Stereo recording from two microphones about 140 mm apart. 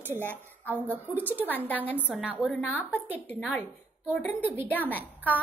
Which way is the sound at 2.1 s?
10° right (ahead or behind).